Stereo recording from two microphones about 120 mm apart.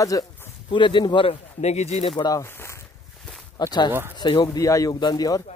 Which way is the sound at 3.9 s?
15° right (ahead or behind).